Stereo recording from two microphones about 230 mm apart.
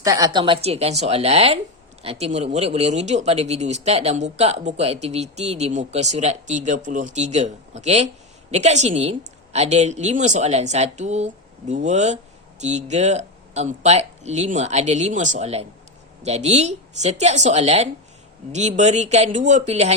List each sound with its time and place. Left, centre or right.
0.0 s speech: centre